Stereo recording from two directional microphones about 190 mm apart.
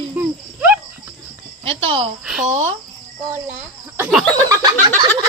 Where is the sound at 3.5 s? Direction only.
10° right (ahead or behind).